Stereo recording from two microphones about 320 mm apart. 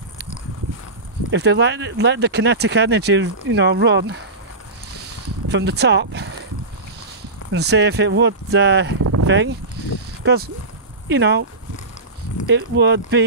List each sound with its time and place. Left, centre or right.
1.3 s speech: right
5.0 s a sound: right
7.5 s speech: right
12.4 s speech: right